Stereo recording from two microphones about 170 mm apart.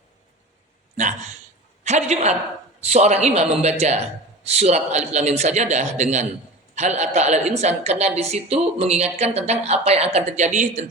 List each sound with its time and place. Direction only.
1.8 s a man's voice: 45° right (ahead or behind)